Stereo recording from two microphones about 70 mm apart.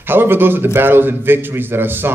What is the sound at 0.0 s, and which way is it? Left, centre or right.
A man's voice, right.